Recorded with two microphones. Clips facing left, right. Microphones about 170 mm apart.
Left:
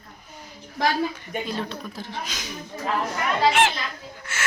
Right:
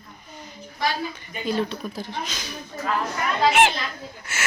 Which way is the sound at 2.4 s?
15° left (ahead or behind).